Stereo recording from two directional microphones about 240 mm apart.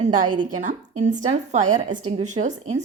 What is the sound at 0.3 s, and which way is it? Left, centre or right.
A woman's voice, right.